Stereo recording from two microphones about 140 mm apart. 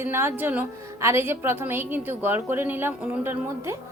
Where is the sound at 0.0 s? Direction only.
15° right (ahead or behind).